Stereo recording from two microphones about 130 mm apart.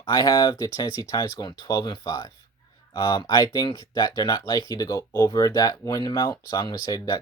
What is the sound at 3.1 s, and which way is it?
Speech, 25° left (ahead or behind).